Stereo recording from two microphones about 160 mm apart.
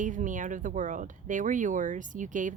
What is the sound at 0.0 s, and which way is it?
Speech, 55° right (ahead or behind).